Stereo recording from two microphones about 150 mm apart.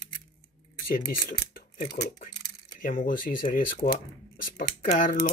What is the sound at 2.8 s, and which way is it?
Speech, 65° left (ahead or behind).